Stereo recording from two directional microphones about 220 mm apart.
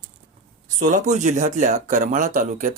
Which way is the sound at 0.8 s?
30° right (ahead or behind).